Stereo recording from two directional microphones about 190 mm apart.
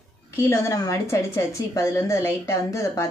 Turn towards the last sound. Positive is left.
turn(degrees=15)  # may be behind; listen again after turning